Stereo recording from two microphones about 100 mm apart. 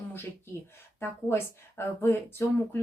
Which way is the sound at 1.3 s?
25° left (ahead or behind).